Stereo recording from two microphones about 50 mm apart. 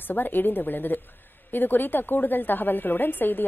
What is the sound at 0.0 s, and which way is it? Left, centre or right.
A woman's voice, left.